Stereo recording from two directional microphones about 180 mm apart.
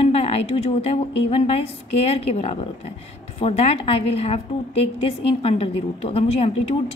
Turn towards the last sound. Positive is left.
turn(degrees=35)  # may be behind; listen again after turning